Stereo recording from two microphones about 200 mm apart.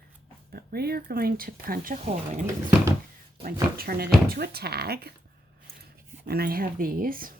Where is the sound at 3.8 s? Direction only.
50° right (ahead or behind).